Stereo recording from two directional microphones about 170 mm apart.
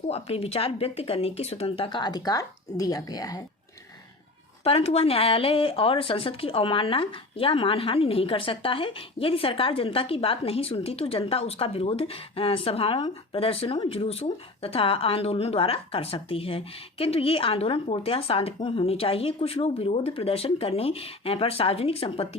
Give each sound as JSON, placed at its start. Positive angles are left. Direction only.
{"t": 0.1, "sound": "speech", "side_deg": 35}
{"t": 4.6, "sound": "speech", "side_deg": 35}